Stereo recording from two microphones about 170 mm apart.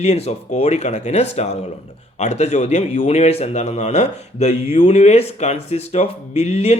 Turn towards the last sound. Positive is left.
turn(degrees=40)  # may be behind; listen again after turning